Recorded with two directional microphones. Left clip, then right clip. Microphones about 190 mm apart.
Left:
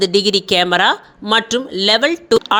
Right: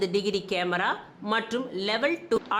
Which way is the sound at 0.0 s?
35° left (ahead or behind).